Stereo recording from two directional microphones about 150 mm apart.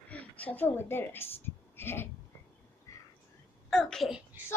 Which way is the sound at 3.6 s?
Centre (ahead or behind).